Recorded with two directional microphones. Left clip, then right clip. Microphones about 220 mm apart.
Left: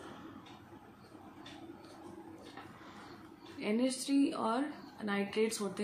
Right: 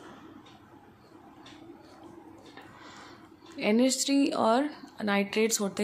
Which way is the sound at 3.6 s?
50° right (ahead or behind).